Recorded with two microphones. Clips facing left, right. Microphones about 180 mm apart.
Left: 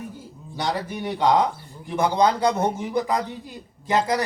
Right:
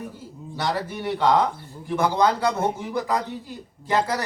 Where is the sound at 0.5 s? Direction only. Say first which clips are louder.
Even; 15° left (ahead or behind).